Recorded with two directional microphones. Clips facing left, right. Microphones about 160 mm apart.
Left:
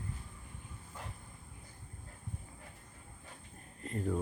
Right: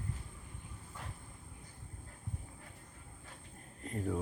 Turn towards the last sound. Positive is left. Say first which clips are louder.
# left 1 dB
turn(degrees=0)  # may be behind; listen again after turning